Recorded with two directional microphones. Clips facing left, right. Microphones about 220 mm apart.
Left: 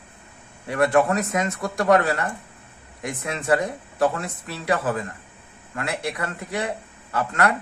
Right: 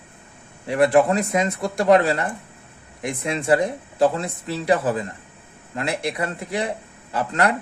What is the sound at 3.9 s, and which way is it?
Speech, 20° right (ahead or behind).